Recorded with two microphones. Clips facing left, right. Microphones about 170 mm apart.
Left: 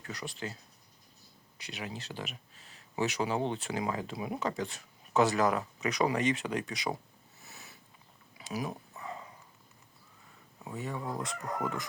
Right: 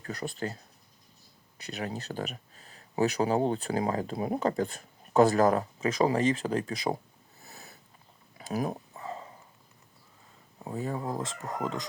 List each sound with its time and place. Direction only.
0.1 s speech: 50° right (ahead or behind)
1.7 s speech: 40° right (ahead or behind)
5.8 s speech: 30° right (ahead or behind)
7.4 s cat: 35° right (ahead or behind)
8.4 s speech: 45° right (ahead or behind)
8.7 s a sound: 30° right (ahead or behind)
10.6 s speech: 35° right (ahead or behind); by 11.9 s 20° right (ahead or behind)